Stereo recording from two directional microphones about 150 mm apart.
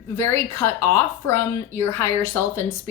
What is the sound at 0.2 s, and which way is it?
A woman's voice, 15° left (ahead or behind).